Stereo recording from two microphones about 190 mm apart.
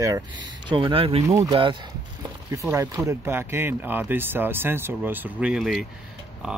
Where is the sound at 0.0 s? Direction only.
20° right (ahead or behind).